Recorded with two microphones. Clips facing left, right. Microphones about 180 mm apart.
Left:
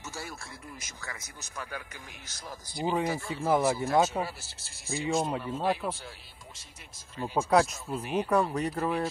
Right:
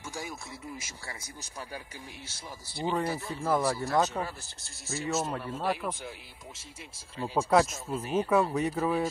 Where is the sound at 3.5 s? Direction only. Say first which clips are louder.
Left 2 dB; 20° left (ahead or behind); by 6.8 s 25° right (ahead or behind).